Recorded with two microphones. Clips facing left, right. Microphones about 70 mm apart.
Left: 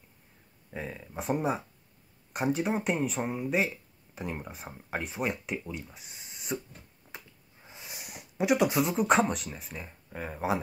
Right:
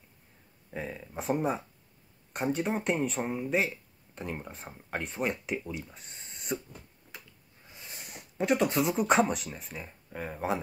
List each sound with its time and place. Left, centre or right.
0.7 s speech: centre
7.6 s a sound: left
7.9 s speech: centre